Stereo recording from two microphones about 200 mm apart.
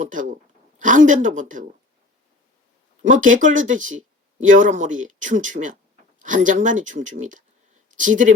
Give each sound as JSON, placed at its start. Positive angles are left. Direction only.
{"t": 0.0, "sound": "speech", "side_deg": -40}
{"t": 3.1, "sound": "speech", "side_deg": -40}